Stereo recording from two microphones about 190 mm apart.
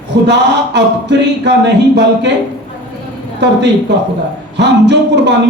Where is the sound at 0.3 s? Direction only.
65° right (ahead or behind).